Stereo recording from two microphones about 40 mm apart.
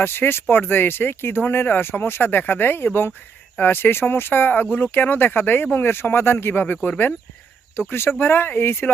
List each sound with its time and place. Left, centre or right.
0.0 s speech: left
7.9 s speech: left